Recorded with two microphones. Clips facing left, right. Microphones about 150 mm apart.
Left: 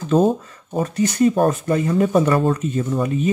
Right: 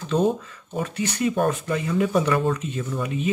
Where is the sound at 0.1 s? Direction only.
40° left (ahead or behind).